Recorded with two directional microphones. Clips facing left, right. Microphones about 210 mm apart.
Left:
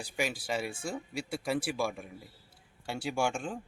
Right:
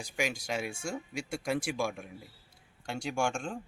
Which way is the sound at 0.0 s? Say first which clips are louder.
Even; 5° left (ahead or behind).